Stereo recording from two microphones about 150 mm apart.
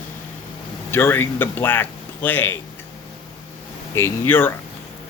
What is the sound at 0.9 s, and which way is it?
Speech, 15° left (ahead or behind).